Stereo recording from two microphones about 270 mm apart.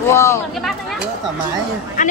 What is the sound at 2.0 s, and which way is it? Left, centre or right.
Speech, left.